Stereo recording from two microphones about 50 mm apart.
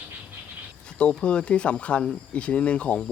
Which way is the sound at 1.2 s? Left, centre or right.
Left.